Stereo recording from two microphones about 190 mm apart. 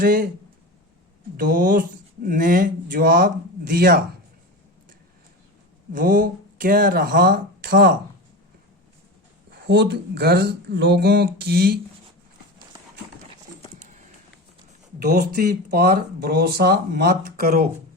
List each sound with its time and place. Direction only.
0.0 s speech: 50° right (ahead or behind)
1.4 s speech: 45° right (ahead or behind)
5.9 s speech: 45° right (ahead or behind)
9.5 s speech: 65° right (ahead or behind)
14.9 s speech: 55° right (ahead or behind)